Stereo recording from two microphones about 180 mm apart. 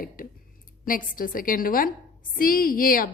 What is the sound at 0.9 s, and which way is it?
A woman's voice, 50° left (ahead or behind).